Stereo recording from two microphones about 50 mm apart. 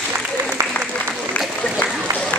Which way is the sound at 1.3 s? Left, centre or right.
Centre.